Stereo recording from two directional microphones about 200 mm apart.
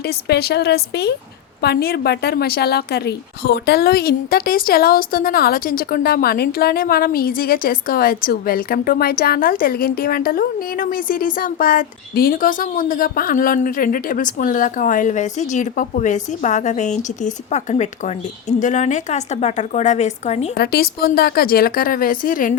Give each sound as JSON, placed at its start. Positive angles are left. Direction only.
{"t": 0.0, "sound": "a woman's voice", "side_deg": 55}
{"t": 20.6, "sound": "a woman's voice", "side_deg": 50}